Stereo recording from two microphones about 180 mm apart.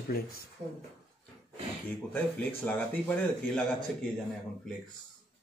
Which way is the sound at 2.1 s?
10° left (ahead or behind).